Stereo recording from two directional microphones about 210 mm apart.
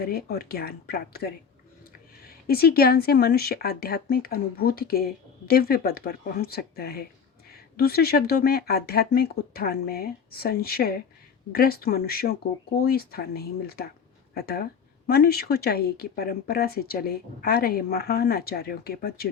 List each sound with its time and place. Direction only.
0.0 s speech: 45° left (ahead or behind)